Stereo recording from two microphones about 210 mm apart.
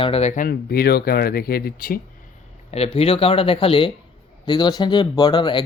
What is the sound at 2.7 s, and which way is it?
Speech, 30° left (ahead or behind).